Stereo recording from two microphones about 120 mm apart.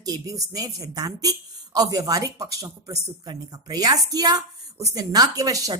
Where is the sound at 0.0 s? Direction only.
30° right (ahead or behind).